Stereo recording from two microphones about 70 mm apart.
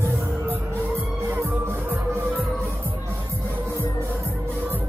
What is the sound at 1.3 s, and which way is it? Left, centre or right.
Music, right.